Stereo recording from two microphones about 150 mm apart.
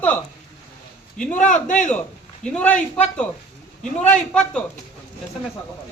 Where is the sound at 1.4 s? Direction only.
55° left (ahead or behind).